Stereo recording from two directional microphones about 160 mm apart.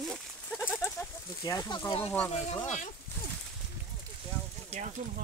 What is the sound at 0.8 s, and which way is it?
Speech, 20° left (ahead or behind).